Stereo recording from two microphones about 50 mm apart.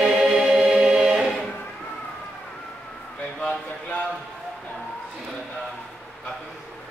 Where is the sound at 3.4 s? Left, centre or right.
Left.